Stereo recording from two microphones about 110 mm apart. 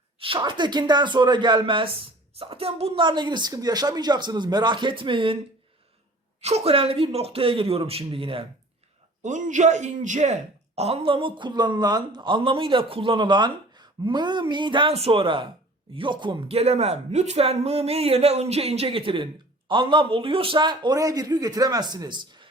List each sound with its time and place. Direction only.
0.2 s speech: 50° right (ahead or behind)
3.0 s speech: 45° right (ahead or behind)
6.4 s speech: 70° right (ahead or behind); by 8.4 s 55° right (ahead or behind)
9.2 s speech: 90° right
10.8 s speech: 65° right (ahead or behind); by 14.9 s 45° right (ahead or behind)
14.9 s speech: 60° right (ahead or behind)
16.5 s speech: 70° right (ahead or behind); by 22.4 s 45° right (ahead or behind)